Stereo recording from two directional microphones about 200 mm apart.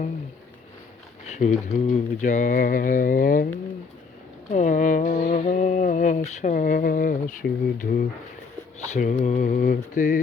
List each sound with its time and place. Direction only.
1.3 s speech: 35° left (ahead or behind)
4.5 s mantra: 40° left (ahead or behind)
8.9 s mantra: 40° left (ahead or behind)